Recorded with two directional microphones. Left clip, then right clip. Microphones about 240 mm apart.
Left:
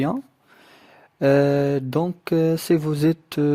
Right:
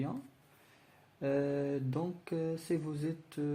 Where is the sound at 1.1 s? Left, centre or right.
Left.